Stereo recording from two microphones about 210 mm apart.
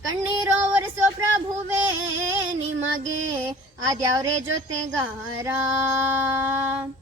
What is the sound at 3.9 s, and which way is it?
Female singing, 15° right (ahead or behind).